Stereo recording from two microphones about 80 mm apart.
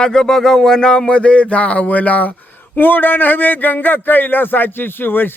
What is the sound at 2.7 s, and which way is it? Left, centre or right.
A man's voice, left.